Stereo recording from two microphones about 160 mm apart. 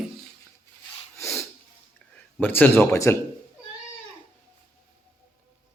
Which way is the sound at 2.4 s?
10° left (ahead or behind).